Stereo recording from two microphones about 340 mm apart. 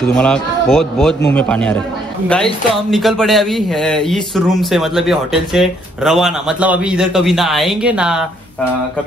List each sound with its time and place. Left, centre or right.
0.1 s speech: centre